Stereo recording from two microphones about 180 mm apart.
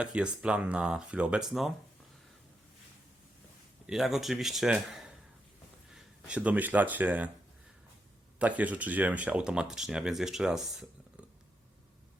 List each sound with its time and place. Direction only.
0.0 s speech: 5° right (ahead or behind)
3.8 s speech: centre (ahead or behind)
8.4 s speech: 10° right (ahead or behind)